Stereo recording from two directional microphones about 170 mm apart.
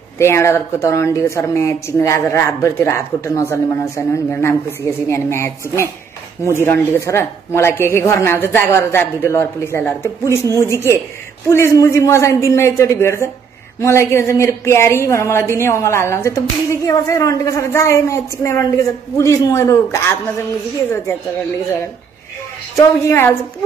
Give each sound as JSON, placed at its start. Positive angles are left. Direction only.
{"t": 0.2, "sound": "a woman's voice", "side_deg": 15}
{"t": 22.8, "sound": "a woman's voice", "side_deg": 15}